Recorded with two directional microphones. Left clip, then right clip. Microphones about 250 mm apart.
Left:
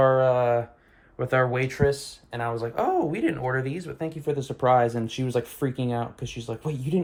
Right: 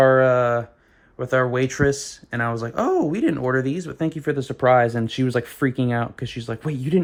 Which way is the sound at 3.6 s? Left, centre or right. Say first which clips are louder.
Right 6 dB; centre.